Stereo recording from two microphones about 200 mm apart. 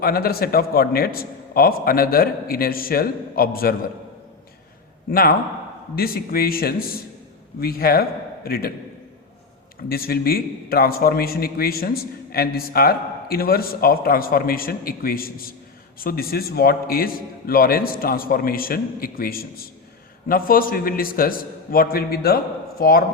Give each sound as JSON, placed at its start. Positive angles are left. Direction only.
{"t": 0.0, "sound": "a man's voice", "side_deg": 50}
{"t": 5.1, "sound": "a man's voice", "side_deg": 45}
{"t": 9.9, "sound": "a man's voice", "side_deg": 50}